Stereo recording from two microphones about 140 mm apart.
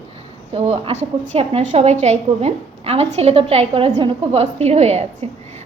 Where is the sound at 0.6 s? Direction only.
50° right (ahead or behind).